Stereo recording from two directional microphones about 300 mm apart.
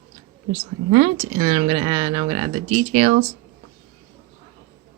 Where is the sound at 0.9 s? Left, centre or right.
Right.